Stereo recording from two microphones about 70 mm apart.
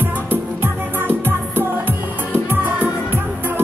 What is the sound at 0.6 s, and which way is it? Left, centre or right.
Music, right.